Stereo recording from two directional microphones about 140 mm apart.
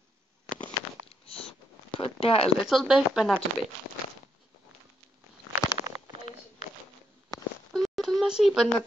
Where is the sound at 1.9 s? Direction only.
40° left (ahead or behind).